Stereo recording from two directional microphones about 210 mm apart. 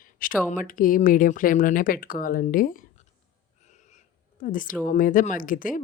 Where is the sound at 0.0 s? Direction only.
40° left (ahead or behind).